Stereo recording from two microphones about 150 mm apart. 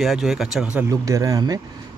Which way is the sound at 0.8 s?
20° right (ahead or behind).